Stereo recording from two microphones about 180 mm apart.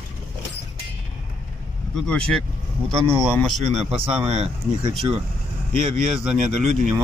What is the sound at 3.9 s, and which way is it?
Speech, 30° right (ahead or behind).